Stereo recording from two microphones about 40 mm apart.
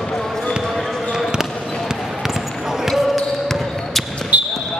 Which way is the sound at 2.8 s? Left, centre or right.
Centre.